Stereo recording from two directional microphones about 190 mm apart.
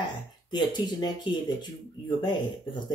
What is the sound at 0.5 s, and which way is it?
Speech, 25° left (ahead or behind).